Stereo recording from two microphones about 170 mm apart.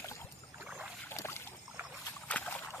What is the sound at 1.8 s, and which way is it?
Rowboat, 15° right (ahead or behind).